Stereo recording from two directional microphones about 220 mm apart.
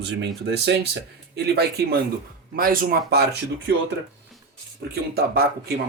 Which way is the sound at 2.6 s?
40° right (ahead or behind).